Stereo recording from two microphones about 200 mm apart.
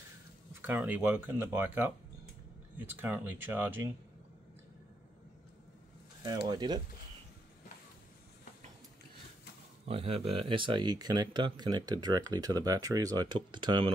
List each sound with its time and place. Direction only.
0.6 s speech: 10° right (ahead or behind)
3.0 s speech: 10° right (ahead or behind)
6.2 s speech: 20° right (ahead or behind)
9.8 s speech: 30° right (ahead or behind)